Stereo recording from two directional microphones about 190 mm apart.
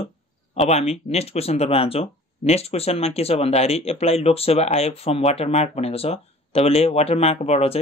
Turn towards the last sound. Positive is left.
turn(degrees=35)  # may be behind; listen again after turning